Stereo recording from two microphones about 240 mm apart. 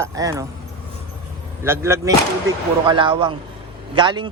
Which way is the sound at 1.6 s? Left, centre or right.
Centre.